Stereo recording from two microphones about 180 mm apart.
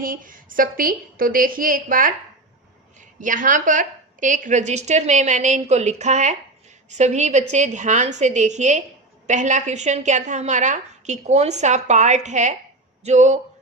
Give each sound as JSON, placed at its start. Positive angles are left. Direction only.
{"t": 0.0, "sound": "a woman's voice", "side_deg": -50}
{"t": 3.2, "sound": "a woman's voice", "side_deg": -45}